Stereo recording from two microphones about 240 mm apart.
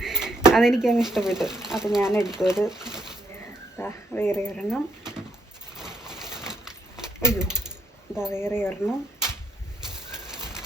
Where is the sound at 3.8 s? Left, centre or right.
Centre.